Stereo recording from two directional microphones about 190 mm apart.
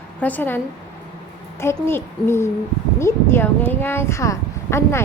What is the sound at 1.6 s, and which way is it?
Speech, 10° left (ahead or behind).